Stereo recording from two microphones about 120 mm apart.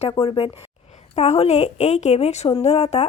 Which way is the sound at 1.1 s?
60° left (ahead or behind).